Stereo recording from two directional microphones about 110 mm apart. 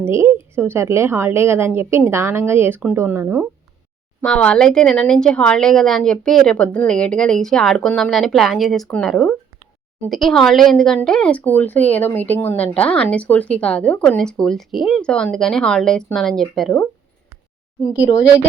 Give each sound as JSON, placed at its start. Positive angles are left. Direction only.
{"t": 0.0, "sound": "a woman's voice", "side_deg": -25}
{"t": 4.2, "sound": "speech", "side_deg": 10}